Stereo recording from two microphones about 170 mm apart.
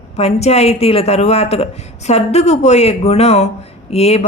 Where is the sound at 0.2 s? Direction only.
40° left (ahead or behind).